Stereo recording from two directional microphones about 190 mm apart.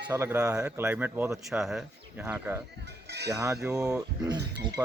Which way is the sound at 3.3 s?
15° right (ahead or behind).